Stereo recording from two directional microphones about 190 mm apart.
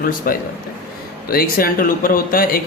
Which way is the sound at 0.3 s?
50° left (ahead or behind).